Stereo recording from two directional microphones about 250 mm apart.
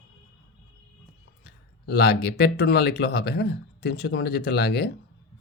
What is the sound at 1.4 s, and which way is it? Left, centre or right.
Speech, left.